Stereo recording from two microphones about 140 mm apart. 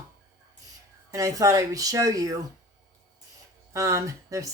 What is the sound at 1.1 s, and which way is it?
Speech, 25° right (ahead or behind).